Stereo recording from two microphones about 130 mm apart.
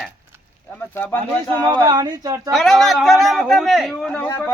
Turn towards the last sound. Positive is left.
turn(degrees=10)  # may be behind; listen again after turning